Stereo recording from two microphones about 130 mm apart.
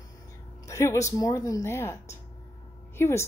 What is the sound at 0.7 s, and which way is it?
Speech, 25° left (ahead or behind).